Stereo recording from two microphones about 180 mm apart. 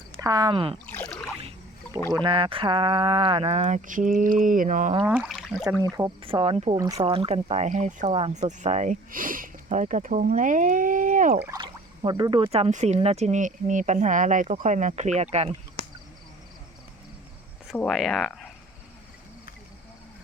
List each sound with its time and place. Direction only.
0.2 s speech: 20° right (ahead or behind)
0.9 s boat: 10° left (ahead or behind)
2.2 s speech: 30° right (ahead or behind)
3.6 s speech: 45° right (ahead or behind)
5.3 s a sound: centre (ahead or behind)
6.2 s speech: 30° right (ahead or behind)
6.7 s speech: 20° right (ahead or behind); by 11.3 s 45° right (ahead or behind)
11.4 s speech: 25° right (ahead or behind)
17.7 s speech: centre (ahead or behind)